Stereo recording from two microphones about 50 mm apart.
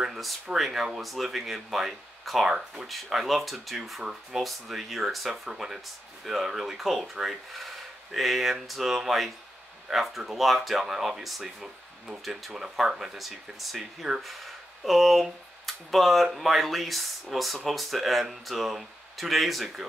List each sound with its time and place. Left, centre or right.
0.0 s speech: centre